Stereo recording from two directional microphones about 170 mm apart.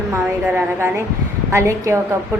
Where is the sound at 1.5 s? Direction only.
15° right (ahead or behind).